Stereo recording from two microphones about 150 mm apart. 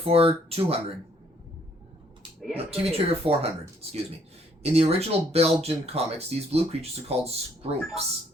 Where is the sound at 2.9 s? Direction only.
40° right (ahead or behind).